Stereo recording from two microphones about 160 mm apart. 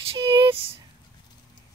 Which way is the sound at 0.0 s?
35° right (ahead or behind).